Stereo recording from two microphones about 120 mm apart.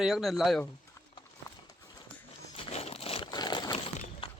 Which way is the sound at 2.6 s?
60° left (ahead or behind).